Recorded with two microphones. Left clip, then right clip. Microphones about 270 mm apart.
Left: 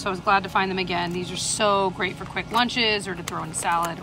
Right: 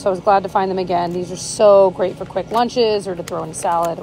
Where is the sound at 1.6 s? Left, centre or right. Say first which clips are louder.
Right 11 dB; left.